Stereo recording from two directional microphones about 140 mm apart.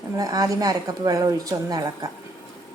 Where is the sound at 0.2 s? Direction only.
25° right (ahead or behind).